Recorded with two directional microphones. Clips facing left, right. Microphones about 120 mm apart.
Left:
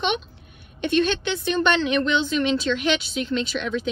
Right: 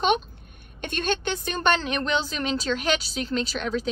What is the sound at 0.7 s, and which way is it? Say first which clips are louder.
A woman's voice: left 6 dB; 45° right (ahead or behind).